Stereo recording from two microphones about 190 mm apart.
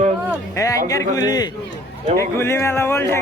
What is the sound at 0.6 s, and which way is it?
A man's voice, 15° left (ahead or behind).